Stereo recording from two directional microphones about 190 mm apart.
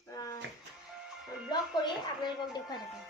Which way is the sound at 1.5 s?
20° left (ahead or behind).